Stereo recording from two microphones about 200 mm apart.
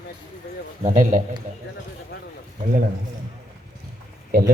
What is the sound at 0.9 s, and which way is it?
Speech, 40° right (ahead or behind).